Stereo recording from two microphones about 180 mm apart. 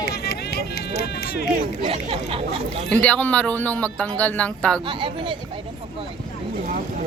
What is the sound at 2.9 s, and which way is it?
A man's voice, 10° left (ahead or behind).